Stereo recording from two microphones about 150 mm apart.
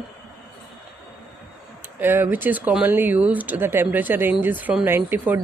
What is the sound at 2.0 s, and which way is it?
A woman's voice, 15° right (ahead or behind).